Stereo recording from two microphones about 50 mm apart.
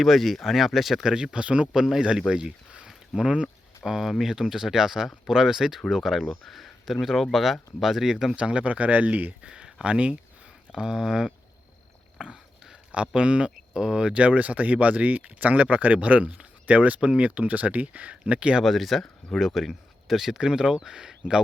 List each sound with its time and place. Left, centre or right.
0.0 s speech: centre
1.0 s speech: centre
2.8 s a sound: centre
3.8 s speech: centre
8.4 s speech: right
9.5 s speech: centre
14.1 s speech: right
18.6 s speech: centre